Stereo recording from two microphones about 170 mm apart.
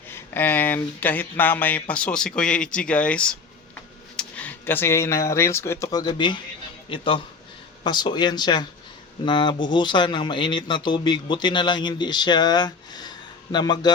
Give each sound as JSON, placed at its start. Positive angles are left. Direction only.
{"t": 0.1, "sound": "speech", "side_deg": 10}